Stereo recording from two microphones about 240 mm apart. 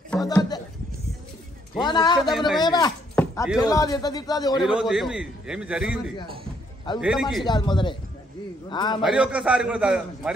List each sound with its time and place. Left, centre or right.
0.2 s a sound: centre
1.8 s a man's voice: centre
2.1 s a man's voice: centre
2.6 s a man's voice: centre
3.2 s a sound: centre
3.5 s a man's voice: centre
4.6 s a man's voice: centre
7.0 s a man's voice: centre
7.4 s speech: centre
9.0 s a man's voice: centre